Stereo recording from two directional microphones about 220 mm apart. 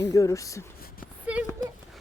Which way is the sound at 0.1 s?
15° left (ahead or behind).